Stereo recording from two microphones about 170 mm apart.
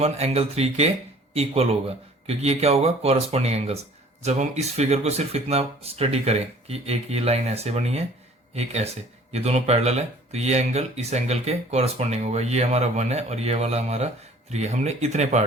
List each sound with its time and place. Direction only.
0.0 s speech: 40° right (ahead or behind)